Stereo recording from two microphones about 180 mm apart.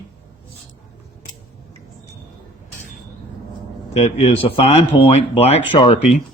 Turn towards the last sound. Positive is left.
turn(degrees=35)  # may be behind; listen again after turning